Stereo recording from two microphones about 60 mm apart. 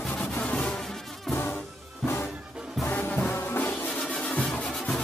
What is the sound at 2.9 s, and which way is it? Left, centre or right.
Music, left.